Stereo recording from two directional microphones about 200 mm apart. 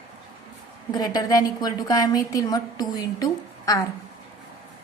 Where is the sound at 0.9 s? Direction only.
20° left (ahead or behind).